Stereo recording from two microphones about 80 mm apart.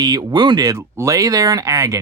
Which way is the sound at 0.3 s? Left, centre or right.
Right.